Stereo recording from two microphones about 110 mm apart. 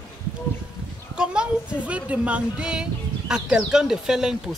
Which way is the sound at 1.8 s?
10° right (ahead or behind).